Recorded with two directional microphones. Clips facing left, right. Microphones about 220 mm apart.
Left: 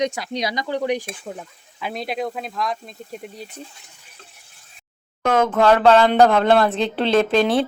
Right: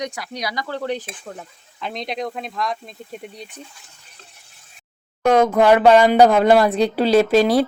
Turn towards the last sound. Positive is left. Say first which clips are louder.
# right 3 dB
turn(degrees=-5)  # may be behind; listen again after turning